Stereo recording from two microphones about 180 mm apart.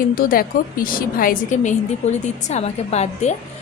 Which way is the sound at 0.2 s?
50° left (ahead or behind).